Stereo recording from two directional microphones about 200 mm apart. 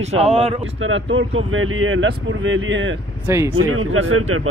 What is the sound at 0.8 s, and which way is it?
Speech, 80° right.